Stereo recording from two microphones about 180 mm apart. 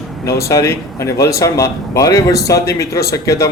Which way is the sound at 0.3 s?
15° left (ahead or behind).